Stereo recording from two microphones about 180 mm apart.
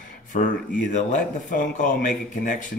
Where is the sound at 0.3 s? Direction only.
45° left (ahead or behind).